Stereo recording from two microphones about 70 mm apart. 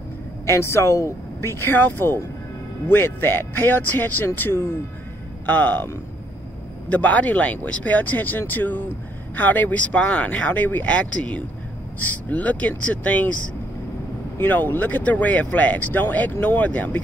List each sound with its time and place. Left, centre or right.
0.5 s speech: left
6.9 s speech: left
14.4 s speech: left